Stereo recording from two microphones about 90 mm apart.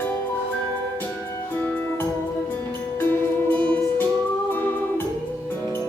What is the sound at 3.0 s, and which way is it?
Music, 20° left (ahead or behind).